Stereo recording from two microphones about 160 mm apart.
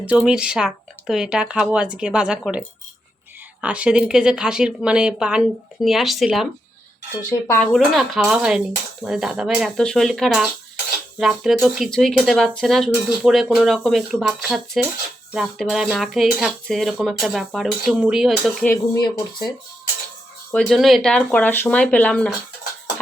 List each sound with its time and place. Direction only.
0.0 s speech: 10° right (ahead or behind)
7.3 s speech: 20° left (ahead or behind)
7.6 s speech: centre (ahead or behind)
20.5 s speech: 5° left (ahead or behind)